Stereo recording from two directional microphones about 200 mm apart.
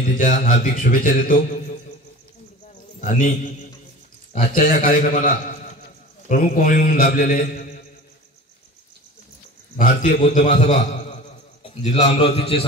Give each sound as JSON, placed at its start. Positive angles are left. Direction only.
{"t": 0.2, "sound": "speech", "side_deg": 40}
{"t": 3.0, "sound": "a man's voice", "side_deg": 40}
{"t": 9.8, "sound": "a man's voice", "side_deg": 40}